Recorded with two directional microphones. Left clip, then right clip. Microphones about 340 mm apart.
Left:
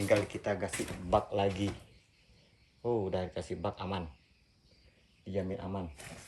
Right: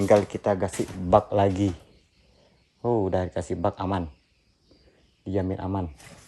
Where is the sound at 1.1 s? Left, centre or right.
Right.